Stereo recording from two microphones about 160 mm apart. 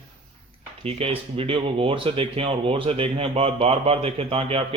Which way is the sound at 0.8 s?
40° right (ahead or behind).